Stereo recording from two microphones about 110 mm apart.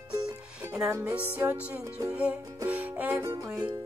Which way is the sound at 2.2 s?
15° right (ahead or behind).